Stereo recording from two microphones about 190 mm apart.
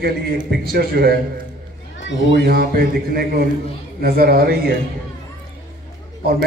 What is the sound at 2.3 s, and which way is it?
A man's voice, 55° right (ahead or behind).